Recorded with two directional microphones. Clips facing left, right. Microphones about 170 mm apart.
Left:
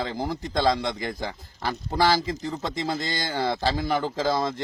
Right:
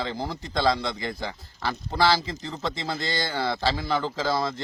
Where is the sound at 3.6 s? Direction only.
45° left (ahead or behind).